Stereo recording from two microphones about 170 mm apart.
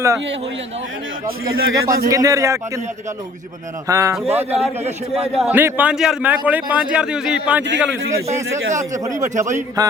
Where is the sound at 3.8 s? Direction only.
20° right (ahead or behind).